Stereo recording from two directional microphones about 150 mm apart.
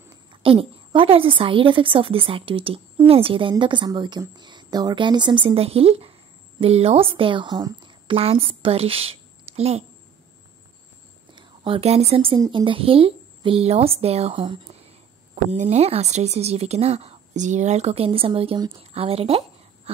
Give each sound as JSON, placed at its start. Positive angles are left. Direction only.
{"t": 0.3, "sound": "a woman's voice", "side_deg": -35}
{"t": 11.3, "sound": "a woman's voice", "side_deg": -35}